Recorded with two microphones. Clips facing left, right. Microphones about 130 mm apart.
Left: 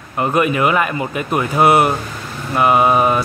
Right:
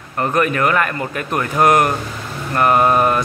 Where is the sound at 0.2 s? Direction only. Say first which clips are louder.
Left 1 dB; 15° left (ahead or behind).